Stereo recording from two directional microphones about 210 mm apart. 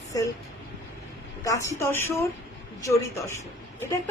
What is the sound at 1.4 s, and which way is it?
A woman's voice, 15° left (ahead or behind).